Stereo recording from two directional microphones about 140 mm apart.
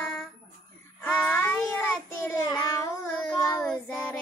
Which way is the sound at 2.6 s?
20° left (ahead or behind).